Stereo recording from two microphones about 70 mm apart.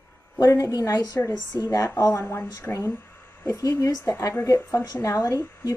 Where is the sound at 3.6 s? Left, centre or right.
Left.